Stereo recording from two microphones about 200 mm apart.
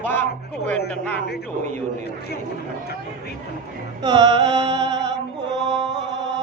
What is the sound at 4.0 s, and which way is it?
Music, 20° right (ahead or behind).